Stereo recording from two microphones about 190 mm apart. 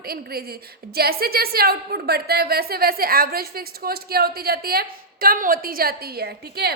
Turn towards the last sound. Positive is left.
turn(degrees=-55)  # may be behind; listen again after turning